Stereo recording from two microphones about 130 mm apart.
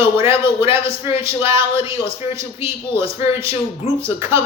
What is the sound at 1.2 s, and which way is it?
Speech, 20° right (ahead or behind).